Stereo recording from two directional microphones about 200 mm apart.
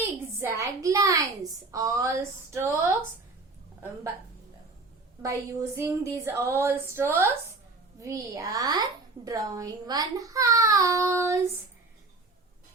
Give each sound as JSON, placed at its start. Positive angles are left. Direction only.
{"t": 0.3, "sound": "a woman's voice", "side_deg": -15}
{"t": 5.2, "sound": "a woman's voice", "side_deg": -15}